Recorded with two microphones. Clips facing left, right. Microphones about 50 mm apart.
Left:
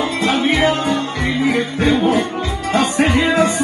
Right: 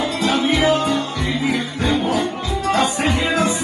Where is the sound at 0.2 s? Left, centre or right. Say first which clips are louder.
Left 2 dB; left.